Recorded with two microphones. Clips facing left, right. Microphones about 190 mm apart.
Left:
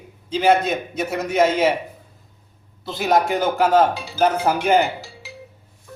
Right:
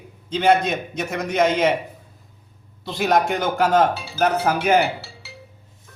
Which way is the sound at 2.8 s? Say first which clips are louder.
Even; centre (ahead or behind).